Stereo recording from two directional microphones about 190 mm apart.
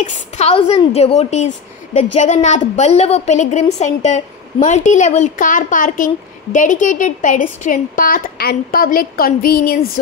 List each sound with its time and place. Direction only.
0.0 s a woman's voice: 35° left (ahead or behind); by 9.8 s 50° left (ahead or behind)